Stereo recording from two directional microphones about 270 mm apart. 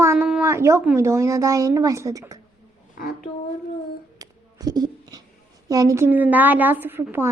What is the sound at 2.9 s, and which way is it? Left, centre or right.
Speech, left.